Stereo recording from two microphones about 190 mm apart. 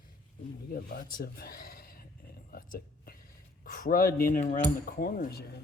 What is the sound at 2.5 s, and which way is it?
Whispering, 50° left (ahead or behind).